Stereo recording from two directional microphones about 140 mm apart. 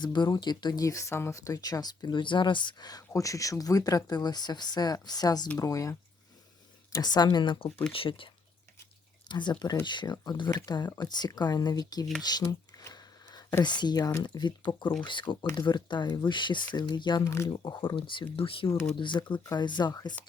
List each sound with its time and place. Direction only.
0.0 s speech: 30° left (ahead or behind)
9.3 s speech: 35° left (ahead or behind)
12.2 s a sound: 30° left (ahead or behind)
13.7 s speech: 30° left (ahead or behind)
17.2 s speech: 20° left (ahead or behind)
17.5 s speech: 30° left (ahead or behind)